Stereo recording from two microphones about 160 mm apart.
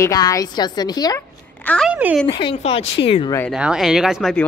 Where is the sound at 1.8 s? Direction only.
5° right (ahead or behind).